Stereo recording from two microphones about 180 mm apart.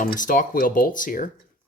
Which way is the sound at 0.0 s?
50° left (ahead or behind).